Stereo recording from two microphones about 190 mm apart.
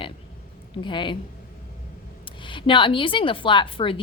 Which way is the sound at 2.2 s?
25° left (ahead or behind).